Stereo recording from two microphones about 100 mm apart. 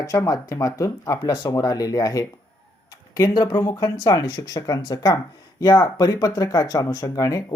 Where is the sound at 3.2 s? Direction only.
50° left (ahead or behind).